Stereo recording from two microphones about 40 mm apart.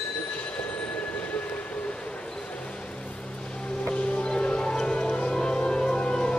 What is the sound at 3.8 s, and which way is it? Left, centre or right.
Music, left.